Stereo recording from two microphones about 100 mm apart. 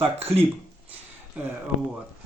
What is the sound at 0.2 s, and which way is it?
Speech, 85° right.